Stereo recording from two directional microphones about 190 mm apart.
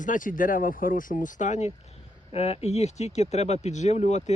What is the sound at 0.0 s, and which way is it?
Speech, 45° left (ahead or behind).